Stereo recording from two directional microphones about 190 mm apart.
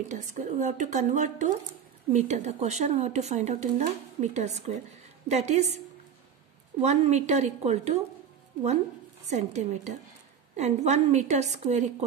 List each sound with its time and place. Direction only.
0.1 s speech: 40° right (ahead or behind)
6.8 s speech: 35° right (ahead or behind)
9.3 s speech: 35° right (ahead or behind)